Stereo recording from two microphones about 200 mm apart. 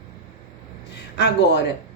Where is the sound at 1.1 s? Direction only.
55° left (ahead or behind).